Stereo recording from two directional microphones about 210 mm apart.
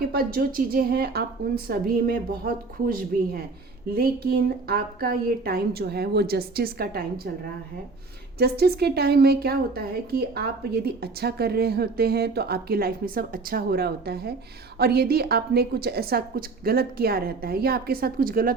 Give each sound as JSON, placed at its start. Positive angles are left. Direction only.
{"t": 0.1, "sound": "a woman's voice", "side_deg": -45}
{"t": 8.4, "sound": "a woman's voice", "side_deg": -50}